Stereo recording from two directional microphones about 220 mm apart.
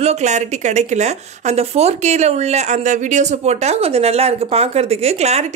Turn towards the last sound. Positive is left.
turn(degrees=-30)  # may be behind; listen again after turning